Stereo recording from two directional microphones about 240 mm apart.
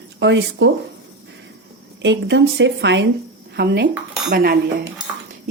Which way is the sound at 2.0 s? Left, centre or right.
Right.